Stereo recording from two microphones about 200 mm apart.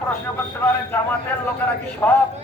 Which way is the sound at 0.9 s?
10° left (ahead or behind).